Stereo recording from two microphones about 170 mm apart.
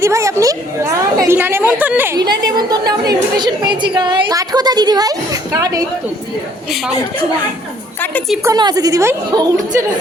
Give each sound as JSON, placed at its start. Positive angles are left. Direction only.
{"t": 0.0, "sound": "a woman's voice", "side_deg": -15}
{"t": 2.1, "sound": "a woman's voice", "side_deg": -25}
{"t": 8.4, "sound": "a woman's voice", "side_deg": -25}